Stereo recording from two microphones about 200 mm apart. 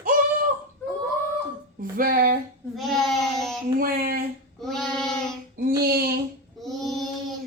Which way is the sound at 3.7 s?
45° right (ahead or behind).